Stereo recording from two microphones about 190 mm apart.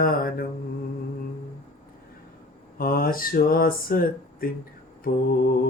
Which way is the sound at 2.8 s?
50° left (ahead or behind).